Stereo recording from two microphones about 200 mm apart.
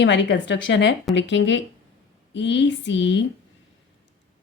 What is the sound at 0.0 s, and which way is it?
A woman's voice, 60° left (ahead or behind).